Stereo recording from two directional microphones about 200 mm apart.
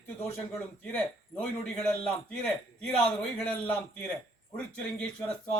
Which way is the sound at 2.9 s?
5° left (ahead or behind).